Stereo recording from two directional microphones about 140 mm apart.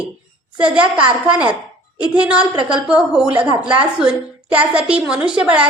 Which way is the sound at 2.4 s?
30° right (ahead or behind).